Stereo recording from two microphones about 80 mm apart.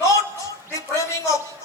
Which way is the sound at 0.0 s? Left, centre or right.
Left.